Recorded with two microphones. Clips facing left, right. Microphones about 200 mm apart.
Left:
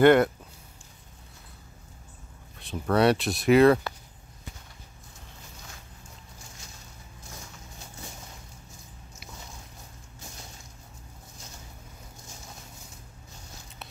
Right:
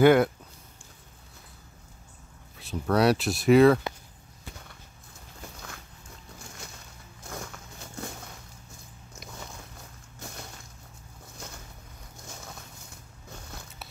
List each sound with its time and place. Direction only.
0.0 s speech: 5° right (ahead or behind)
2.5 s speech: centre (ahead or behind)
7.2 s a sound: 65° right (ahead or behind)